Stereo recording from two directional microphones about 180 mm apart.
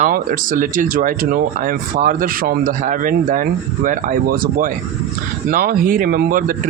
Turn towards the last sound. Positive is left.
turn(degrees=-50)  # may be behind; listen again after turning